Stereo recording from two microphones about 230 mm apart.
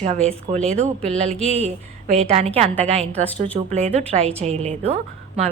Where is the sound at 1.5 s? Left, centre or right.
Right.